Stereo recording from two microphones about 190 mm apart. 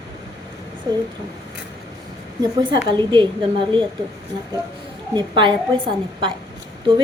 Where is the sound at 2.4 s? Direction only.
25° right (ahead or behind).